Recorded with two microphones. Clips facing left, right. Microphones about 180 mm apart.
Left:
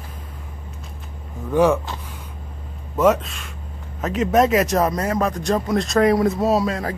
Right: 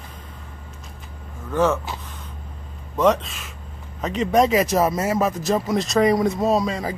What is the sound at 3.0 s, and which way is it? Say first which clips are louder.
Speech: left 1 dB; 5° left (ahead or behind).